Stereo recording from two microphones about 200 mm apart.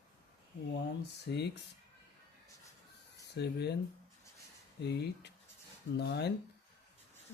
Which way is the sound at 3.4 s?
55° left (ahead or behind).